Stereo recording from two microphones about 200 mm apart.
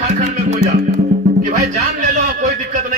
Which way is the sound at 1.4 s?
35° right (ahead or behind).